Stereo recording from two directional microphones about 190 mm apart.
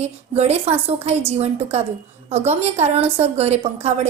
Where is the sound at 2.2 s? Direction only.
35° right (ahead or behind).